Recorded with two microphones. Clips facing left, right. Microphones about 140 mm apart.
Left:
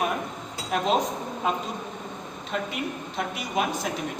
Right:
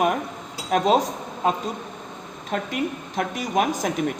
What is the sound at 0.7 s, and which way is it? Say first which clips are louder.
Speech: right 5 dB; 40° right (ahead or behind).